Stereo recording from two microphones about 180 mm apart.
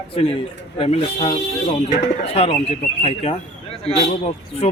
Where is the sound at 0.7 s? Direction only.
35° left (ahead or behind).